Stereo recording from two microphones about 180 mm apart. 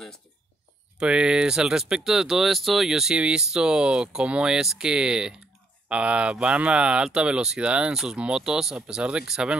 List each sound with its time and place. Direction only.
0.9 s speech: 5° right (ahead or behind)